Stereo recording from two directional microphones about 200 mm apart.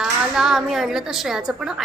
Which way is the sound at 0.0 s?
Centre (ahead or behind).